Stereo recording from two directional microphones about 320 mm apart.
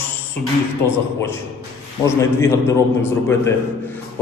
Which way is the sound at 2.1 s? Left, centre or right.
Centre.